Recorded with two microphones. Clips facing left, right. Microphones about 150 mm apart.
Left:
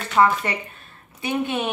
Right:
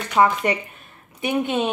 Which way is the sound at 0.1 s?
20° right (ahead or behind).